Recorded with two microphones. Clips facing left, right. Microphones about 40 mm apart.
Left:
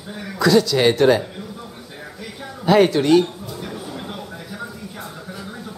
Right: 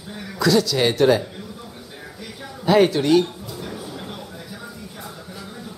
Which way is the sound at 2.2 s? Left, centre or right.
Centre.